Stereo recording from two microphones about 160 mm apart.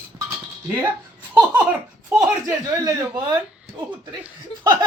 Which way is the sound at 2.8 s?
25° right (ahead or behind).